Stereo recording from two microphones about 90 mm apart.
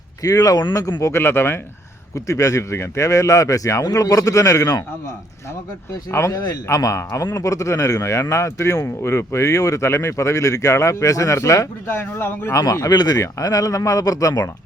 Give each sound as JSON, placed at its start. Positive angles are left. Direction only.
{"t": 0.2, "sound": "speech", "side_deg": 45}
{"t": 1.0, "sound": "speech", "side_deg": 30}
{"t": 2.1, "sound": "a man's voice", "side_deg": 35}
{"t": 6.1, "sound": "a man's voice", "side_deg": 30}
{"t": 6.3, "sound": "a man's voice", "side_deg": 45}
{"t": 11.9, "sound": "speech", "side_deg": 25}
{"t": 12.5, "sound": "a man's voice", "side_deg": 40}